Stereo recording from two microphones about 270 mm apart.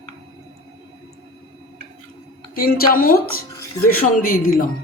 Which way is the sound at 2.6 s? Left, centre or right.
Left.